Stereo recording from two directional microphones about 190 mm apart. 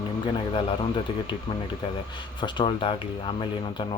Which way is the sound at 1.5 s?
30° left (ahead or behind).